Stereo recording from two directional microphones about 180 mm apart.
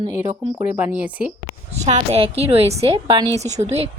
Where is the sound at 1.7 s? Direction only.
35° right (ahead or behind).